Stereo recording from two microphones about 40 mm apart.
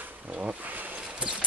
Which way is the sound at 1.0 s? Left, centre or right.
Right.